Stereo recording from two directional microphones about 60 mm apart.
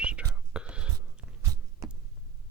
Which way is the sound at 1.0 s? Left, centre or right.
Right.